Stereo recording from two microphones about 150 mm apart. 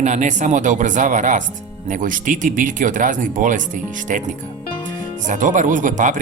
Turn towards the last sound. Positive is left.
turn(degrees=-55)  # may be behind; listen again after turning